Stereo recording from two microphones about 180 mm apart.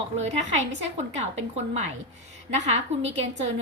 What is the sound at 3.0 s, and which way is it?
Speech, 35° right (ahead or behind).